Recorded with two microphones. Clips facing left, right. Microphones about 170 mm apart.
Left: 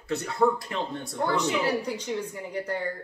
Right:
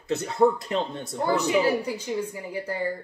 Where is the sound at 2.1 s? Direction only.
5° right (ahead or behind).